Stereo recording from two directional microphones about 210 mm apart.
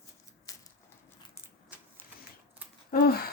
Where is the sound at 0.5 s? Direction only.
15° left (ahead or behind).